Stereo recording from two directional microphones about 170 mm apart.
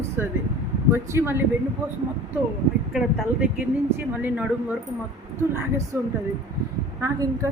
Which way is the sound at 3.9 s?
10° right (ahead or behind).